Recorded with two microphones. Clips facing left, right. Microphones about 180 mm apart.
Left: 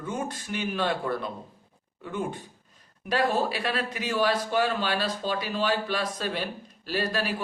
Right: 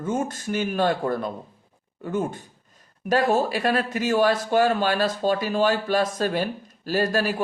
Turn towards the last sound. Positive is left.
turn(degrees=-45)  # may be behind; listen again after turning